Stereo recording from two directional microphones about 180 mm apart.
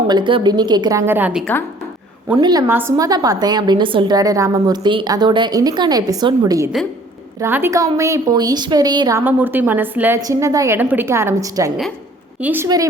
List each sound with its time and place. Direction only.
0.1 s a woman's voice: 25° right (ahead or behind); by 1.5 s 5° right (ahead or behind)
2.4 s a woman's voice: 20° right (ahead or behind)
9.2 s a woman's voice: 10° right (ahead or behind)
12.6 s a woman's voice: 20° right (ahead or behind)